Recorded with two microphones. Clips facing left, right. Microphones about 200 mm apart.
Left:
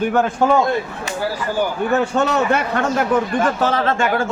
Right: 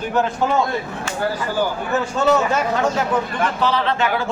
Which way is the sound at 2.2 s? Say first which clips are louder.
Even; 60° left (ahead or behind).